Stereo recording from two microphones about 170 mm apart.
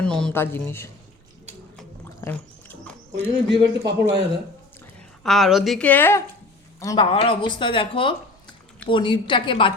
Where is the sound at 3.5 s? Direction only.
85° right.